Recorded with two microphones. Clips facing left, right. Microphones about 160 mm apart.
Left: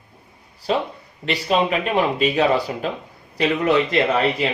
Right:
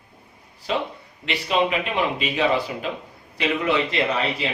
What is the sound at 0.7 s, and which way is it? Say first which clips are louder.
Speech: left 4 dB; 40° left (ahead or behind).